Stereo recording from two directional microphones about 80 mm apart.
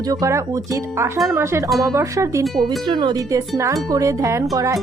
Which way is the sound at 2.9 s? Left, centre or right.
Right.